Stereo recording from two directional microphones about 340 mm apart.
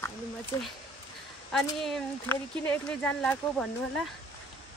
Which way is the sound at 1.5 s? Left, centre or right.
Centre.